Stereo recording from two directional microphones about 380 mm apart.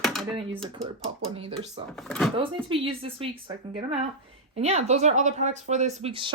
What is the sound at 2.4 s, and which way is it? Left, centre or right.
Speech, centre.